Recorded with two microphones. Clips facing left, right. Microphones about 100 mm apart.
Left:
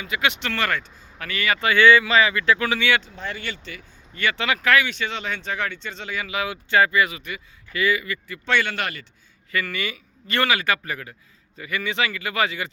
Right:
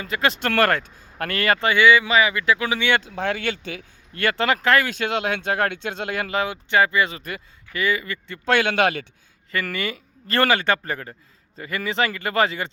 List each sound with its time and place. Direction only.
0.0 s speech: 35° right (ahead or behind)
1.7 s speech: 15° right (ahead or behind)
3.2 s speech: 65° right (ahead or behind)
4.2 s speech: 40° right (ahead or behind)
4.9 s speech: 50° right (ahead or behind)
6.3 s speech: 25° right (ahead or behind)
8.5 s a man's voice: 60° right (ahead or behind)
9.5 s speech: 35° right (ahead or behind)